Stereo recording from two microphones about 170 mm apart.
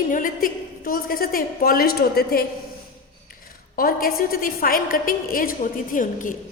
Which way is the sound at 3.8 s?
60° left (ahead or behind).